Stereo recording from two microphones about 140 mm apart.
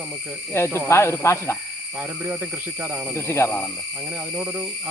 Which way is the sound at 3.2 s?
20° left (ahead or behind).